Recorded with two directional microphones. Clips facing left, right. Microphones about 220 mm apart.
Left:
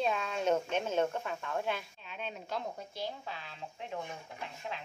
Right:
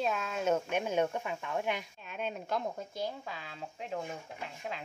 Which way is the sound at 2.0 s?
50° right (ahead or behind).